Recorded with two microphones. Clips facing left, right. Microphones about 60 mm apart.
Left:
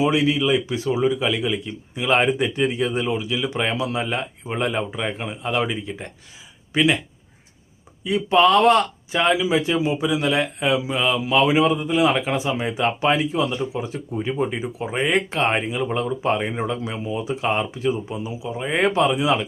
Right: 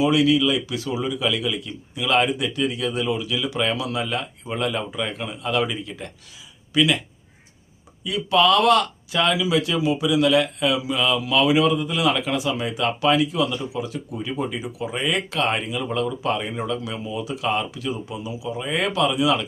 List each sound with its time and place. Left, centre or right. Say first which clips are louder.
0.0 s speech: right 1 dB; left
8.0 s speech: left 2 dB; left